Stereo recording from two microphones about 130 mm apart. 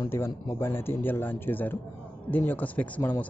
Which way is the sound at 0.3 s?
20° left (ahead or behind).